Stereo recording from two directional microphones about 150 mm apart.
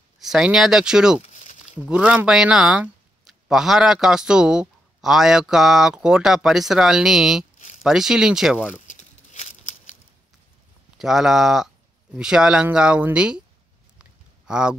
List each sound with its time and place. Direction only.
0.2 s speech: 5° right (ahead or behind)
1.2 s a sound: 55° left (ahead or behind)
1.9 s speech: 5° right (ahead or behind)
7.5 s zipper: 55° left (ahead or behind)
7.8 s speech: 5° right (ahead or behind)
8.8 s a sound: 55° left (ahead or behind)
11.0 s speech: 5° right (ahead or behind)
14.5 s speech: 5° right (ahead or behind)